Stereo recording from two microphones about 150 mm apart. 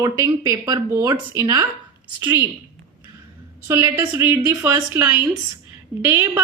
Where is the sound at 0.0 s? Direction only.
25° right (ahead or behind).